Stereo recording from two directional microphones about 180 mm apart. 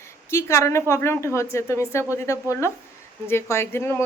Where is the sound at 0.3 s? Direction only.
15° left (ahead or behind).